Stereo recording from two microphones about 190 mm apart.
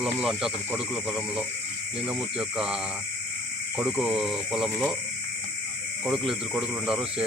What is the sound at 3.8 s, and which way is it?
Speech, 5° right (ahead or behind).